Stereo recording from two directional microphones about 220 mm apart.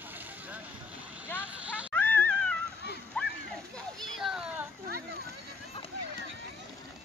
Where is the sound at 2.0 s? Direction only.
10° left (ahead or behind).